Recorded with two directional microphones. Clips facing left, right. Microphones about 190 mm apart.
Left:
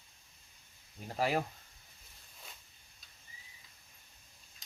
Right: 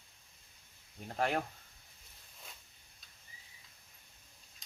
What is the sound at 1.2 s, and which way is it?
Speech, 5° left (ahead or behind).